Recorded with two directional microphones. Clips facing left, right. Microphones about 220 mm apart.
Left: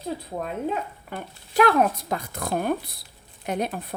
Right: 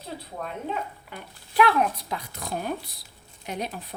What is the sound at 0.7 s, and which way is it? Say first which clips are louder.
Speech: left 3 dB; 45° left (ahead or behind).